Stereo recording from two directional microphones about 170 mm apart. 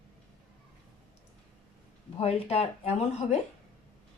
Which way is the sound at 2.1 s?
35° left (ahead or behind).